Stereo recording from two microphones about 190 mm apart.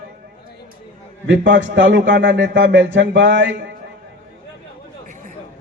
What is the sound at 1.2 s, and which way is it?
A man's voice, 75° right (ahead or behind).